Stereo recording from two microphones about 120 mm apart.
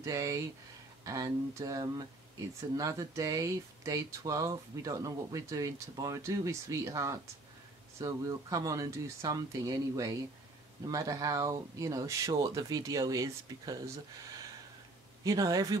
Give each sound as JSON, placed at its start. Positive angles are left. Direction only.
{"t": 0.0, "sound": "speech", "side_deg": -25}
{"t": 15.2, "sound": "speech", "side_deg": -30}